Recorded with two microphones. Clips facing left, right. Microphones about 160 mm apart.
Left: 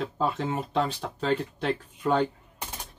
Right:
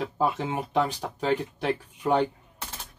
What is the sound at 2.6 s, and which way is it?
Machine gun, 15° left (ahead or behind).